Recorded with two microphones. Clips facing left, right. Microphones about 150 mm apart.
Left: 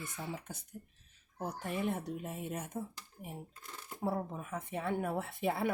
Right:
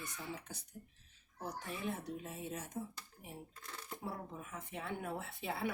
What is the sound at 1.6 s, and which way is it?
Speech, 60° left (ahead or behind).